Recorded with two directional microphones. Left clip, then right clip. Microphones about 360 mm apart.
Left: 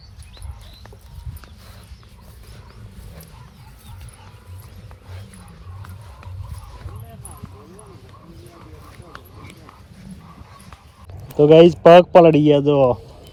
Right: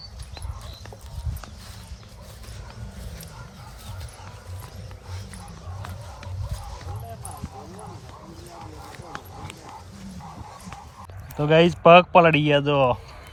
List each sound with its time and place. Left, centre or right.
11.3 s speech: right